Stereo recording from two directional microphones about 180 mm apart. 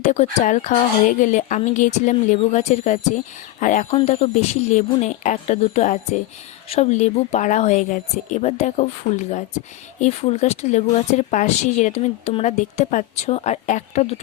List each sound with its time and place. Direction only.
0.0 s speech: 40° left (ahead or behind)